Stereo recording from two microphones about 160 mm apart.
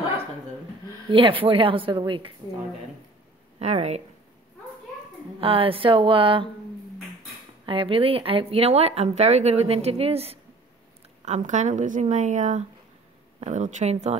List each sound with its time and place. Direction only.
1.0 s speech: 35° right (ahead or behind)
3.5 s speech: 40° right (ahead or behind)
5.4 s speech: 35° right (ahead or behind)
7.6 s a woman's voice: 35° right (ahead or behind)